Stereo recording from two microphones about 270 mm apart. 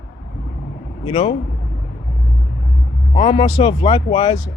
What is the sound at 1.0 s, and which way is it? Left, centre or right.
Speech, left.